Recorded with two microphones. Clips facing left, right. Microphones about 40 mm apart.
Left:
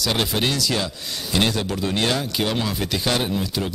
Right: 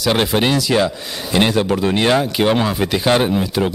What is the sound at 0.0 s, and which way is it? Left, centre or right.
A man's voice, right.